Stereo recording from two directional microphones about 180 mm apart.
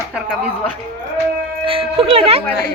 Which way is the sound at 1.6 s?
30° right (ahead or behind).